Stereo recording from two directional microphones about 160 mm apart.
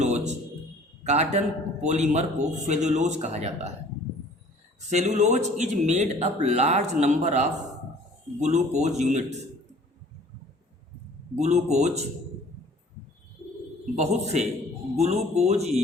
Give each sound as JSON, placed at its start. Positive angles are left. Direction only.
{"t": 0.0, "sound": "a sound", "side_deg": -45}
{"t": 1.0, "sound": "speech", "side_deg": -45}
{"t": 4.9, "sound": "speech", "side_deg": -45}
{"t": 11.3, "sound": "speech", "side_deg": -45}
{"t": 13.9, "sound": "speech", "side_deg": -45}